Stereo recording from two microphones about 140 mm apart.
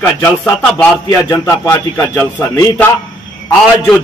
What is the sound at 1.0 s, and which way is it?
A man's voice, 25° left (ahead or behind).